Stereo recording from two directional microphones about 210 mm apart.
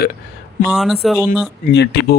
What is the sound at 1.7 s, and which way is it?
Speech, 55° left (ahead or behind).